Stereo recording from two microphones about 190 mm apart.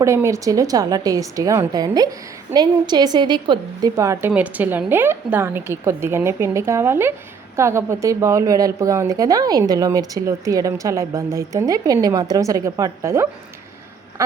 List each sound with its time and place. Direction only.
0.0 s a woman's voice: 15° right (ahead or behind)